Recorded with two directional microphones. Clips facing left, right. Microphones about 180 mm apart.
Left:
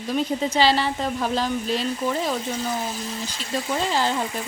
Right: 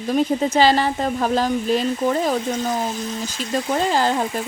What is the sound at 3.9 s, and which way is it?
Speech, 45° right (ahead or behind).